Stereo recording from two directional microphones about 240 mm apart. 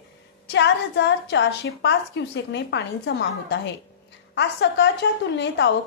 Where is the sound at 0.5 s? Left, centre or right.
Left.